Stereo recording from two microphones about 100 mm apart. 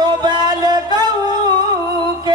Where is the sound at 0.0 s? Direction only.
45° right (ahead or behind).